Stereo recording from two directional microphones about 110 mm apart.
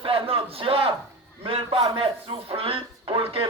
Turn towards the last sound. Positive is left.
turn(degrees=-55)  # may be behind; listen again after turning